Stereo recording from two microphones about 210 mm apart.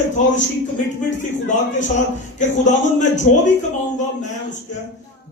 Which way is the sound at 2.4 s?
35° left (ahead or behind).